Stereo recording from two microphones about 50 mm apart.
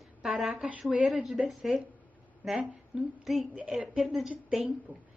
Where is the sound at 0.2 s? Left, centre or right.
Centre.